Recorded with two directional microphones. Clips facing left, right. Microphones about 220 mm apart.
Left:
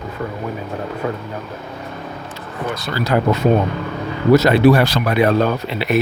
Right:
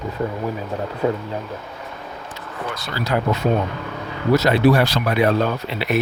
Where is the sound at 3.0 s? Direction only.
55° left (ahead or behind).